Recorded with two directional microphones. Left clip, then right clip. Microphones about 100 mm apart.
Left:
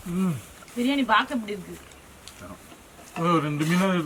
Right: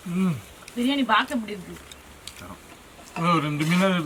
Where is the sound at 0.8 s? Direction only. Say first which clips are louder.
Even; 20° left (ahead or behind).